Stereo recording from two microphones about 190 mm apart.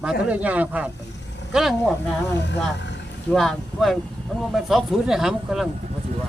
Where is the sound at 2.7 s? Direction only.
65° left (ahead or behind).